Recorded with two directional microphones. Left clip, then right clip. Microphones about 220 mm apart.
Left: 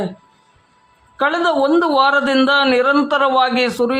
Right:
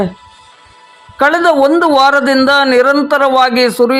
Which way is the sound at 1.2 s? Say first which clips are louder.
Right 7 dB; 20° right (ahead or behind).